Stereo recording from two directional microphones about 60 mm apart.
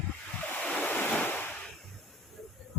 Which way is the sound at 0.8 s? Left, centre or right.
Left.